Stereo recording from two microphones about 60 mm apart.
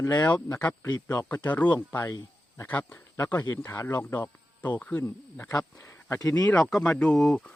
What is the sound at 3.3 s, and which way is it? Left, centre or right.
Speech, left.